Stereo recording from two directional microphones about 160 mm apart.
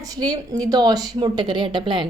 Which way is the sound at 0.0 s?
25° right (ahead or behind).